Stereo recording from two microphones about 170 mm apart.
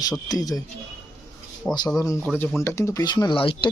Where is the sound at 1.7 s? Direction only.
10° left (ahead or behind); by 3.6 s 30° left (ahead or behind).